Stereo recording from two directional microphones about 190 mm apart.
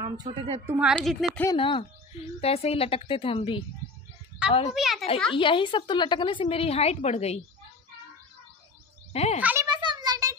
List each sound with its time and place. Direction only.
0.0 s a woman's voice: 25° right (ahead or behind)
0.7 s a woman's voice: 5° right (ahead or behind)
0.9 s a woman's voice: 5° left (ahead or behind)
1.6 s a woman's voice: 30° left (ahead or behind)
4.4 s a woman's voice: 5° right (ahead or behind)
5.3 s a woman's voice: 25° left (ahead or behind)
9.1 s a sound: 35° left (ahead or behind)
9.4 s a sound: 10° right (ahead or behind)
9.7 s a sound: 25° right (ahead or behind)